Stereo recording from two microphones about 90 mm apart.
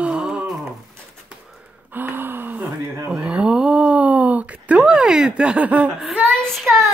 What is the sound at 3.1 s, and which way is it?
Speech, 10° right (ahead or behind).